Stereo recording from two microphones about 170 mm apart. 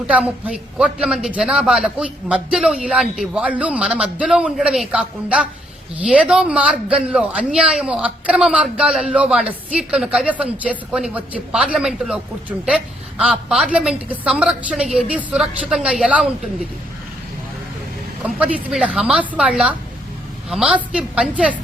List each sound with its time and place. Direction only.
0.1 s a man's voice: 5° right (ahead or behind)
18.3 s speech: 5° right (ahead or behind)